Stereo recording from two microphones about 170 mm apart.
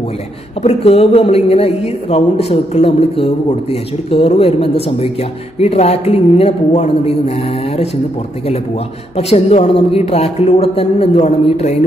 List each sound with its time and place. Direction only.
0.6 s a man's voice: 35° left (ahead or behind)
9.1 s a man's voice: 35° left (ahead or behind)